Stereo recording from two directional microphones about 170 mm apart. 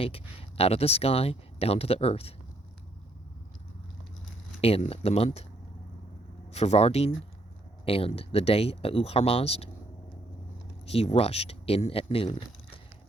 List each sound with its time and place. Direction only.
0.0 s speech: 35° left (ahead or behind)
4.6 s speech: 35° left (ahead or behind)
6.5 s speech: 40° left (ahead or behind)
10.8 s speech: 35° left (ahead or behind)